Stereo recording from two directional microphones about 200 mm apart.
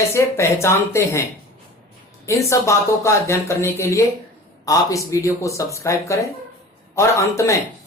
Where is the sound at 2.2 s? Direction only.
15° left (ahead or behind).